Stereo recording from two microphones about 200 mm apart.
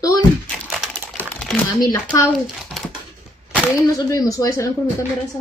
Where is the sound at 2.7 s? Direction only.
Centre (ahead or behind).